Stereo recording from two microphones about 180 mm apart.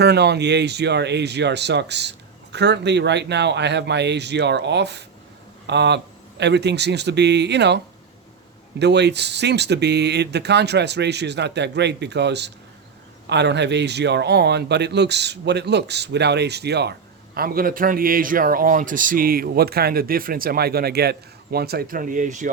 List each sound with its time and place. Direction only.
0.0 s speech: 65° right (ahead or behind)
8.8 s speech: 70° right (ahead or behind)
17.3 s a man's voice: 55° right (ahead or behind)